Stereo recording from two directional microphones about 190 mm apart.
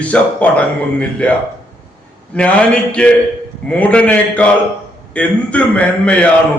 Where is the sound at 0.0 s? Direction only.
5° left (ahead or behind).